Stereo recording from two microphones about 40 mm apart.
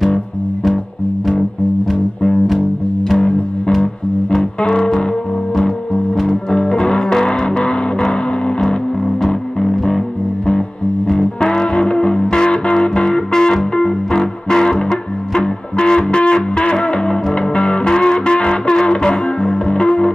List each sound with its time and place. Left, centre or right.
3.2 s music: left
6.3 s music: centre
9.6 s music: centre